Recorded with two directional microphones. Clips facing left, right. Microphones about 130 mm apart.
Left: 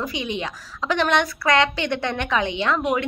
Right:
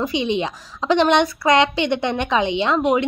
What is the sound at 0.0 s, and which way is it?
A woman's voice, 25° right (ahead or behind).